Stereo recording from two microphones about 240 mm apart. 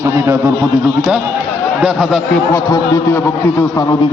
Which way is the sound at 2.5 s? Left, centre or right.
Centre.